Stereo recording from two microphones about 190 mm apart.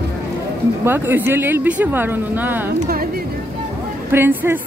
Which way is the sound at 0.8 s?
10° right (ahead or behind).